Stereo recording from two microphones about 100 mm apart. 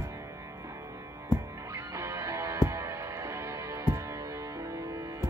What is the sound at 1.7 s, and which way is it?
Music, 30° right (ahead or behind).